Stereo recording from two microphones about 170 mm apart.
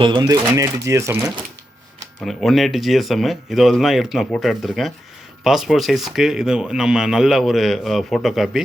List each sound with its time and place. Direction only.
0.0 s speech: 25° right (ahead or behind)
2.2 s speech: centre (ahead or behind)